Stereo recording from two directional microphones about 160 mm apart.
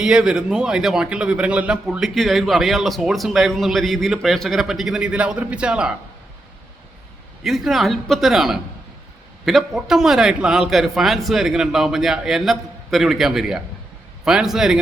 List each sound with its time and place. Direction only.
0.0 s a man's voice: 5° right (ahead or behind)
7.4 s a man's voice: centre (ahead or behind)